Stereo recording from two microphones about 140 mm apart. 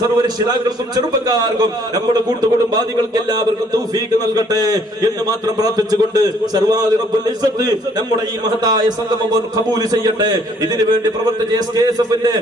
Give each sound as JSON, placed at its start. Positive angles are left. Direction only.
{"t": 0.2, "sound": "a man's voice", "side_deg": -25}
{"t": 4.4, "sound": "a man's voice", "side_deg": -25}
{"t": 8.6, "sound": "a man's voice", "side_deg": -25}
{"t": 11.5, "sound": "a man's voice", "side_deg": -30}